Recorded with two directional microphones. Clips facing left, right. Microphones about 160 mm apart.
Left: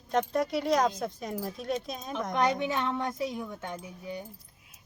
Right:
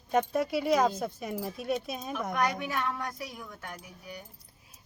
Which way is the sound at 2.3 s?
25° left (ahead or behind).